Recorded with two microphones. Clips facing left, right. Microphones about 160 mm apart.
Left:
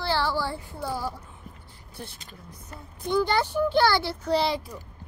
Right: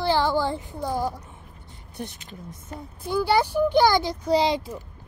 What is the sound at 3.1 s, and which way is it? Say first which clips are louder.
A child's voice: right 2 dB; 10° right (ahead or behind).